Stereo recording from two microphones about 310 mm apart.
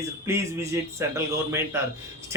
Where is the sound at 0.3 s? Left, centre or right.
Centre.